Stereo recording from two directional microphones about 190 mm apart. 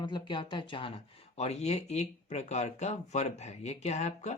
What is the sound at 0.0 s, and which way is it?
Speech, 25° left (ahead or behind).